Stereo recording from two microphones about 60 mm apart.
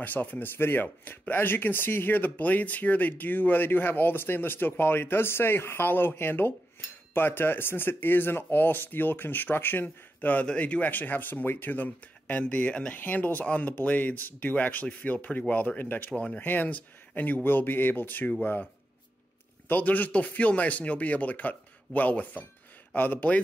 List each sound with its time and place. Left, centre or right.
0.0 s speech: left
10.4 s speech: centre
19.7 s speech: left